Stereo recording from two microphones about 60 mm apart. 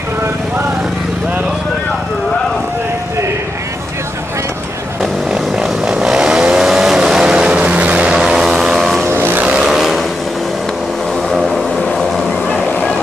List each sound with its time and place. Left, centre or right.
5.0 s vehicle: centre
8.1 s vehicle: centre
9.0 s vehicle: right
9.4 s vehicle: centre
9.7 s vehicle: centre